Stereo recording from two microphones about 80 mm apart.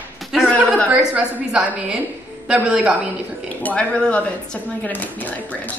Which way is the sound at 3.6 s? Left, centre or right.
Centre.